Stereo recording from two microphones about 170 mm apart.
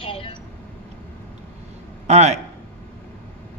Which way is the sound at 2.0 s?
40° right (ahead or behind).